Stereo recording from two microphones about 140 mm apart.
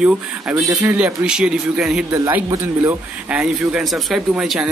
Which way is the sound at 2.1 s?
25° right (ahead or behind).